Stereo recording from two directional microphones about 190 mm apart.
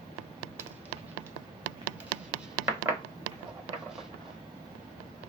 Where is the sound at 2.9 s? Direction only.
15° right (ahead or behind).